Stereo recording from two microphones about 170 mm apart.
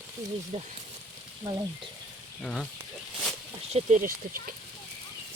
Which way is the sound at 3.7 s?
45° right (ahead or behind).